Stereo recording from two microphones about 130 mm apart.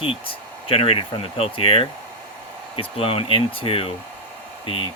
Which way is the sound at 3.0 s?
45° left (ahead or behind).